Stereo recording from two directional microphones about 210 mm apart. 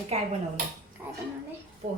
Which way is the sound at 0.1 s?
30° right (ahead or behind).